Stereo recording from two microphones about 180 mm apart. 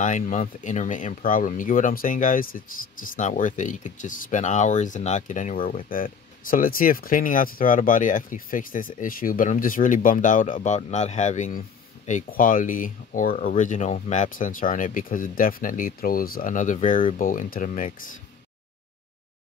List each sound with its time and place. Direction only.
0.0 s speech: 45° left (ahead or behind)